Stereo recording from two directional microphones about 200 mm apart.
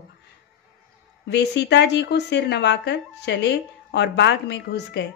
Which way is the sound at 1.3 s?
60° left (ahead or behind).